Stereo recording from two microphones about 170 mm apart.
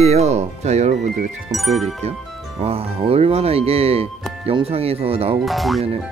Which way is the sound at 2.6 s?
35° right (ahead or behind).